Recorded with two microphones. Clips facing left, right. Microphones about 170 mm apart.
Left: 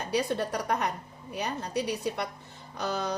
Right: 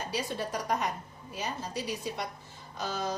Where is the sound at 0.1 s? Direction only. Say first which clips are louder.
Left 7 dB; 60° left (ahead or behind).